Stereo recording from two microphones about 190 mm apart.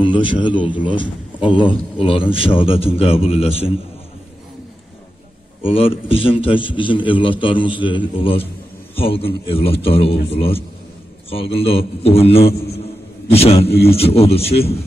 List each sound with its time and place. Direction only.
0.0 s a man's voice: 25° left (ahead or behind)
5.7 s a man's voice: 30° left (ahead or behind)